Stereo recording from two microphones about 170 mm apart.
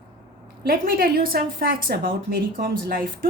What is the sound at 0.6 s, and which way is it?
A woman's voice, 60° right (ahead or behind).